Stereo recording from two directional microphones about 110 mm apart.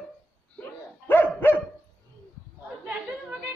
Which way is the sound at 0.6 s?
15° left (ahead or behind).